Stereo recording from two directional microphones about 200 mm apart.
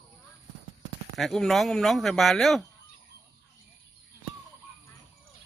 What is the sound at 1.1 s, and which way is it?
Speech, centre (ahead or behind).